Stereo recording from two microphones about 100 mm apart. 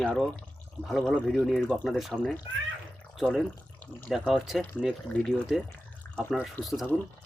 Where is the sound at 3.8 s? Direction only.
15° left (ahead or behind).